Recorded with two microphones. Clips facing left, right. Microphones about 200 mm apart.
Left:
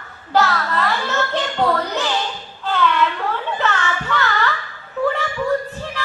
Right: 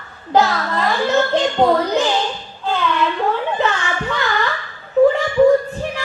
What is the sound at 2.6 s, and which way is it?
Child singing, 15° right (ahead or behind).